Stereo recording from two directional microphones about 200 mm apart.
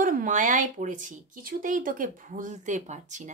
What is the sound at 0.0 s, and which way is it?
Speech, 40° right (ahead or behind).